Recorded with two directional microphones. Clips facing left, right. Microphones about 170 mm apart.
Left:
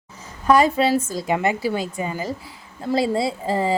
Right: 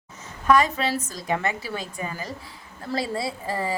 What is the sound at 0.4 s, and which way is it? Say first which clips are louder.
A woman's voice: left 4 dB; 30° left (ahead or behind).